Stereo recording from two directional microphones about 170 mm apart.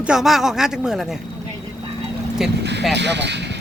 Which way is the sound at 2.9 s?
90° right.